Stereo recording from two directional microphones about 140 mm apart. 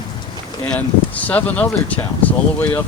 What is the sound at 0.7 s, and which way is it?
Speech, 10° left (ahead or behind).